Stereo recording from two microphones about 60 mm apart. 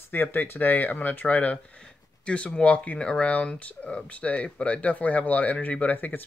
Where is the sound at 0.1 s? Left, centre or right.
Left.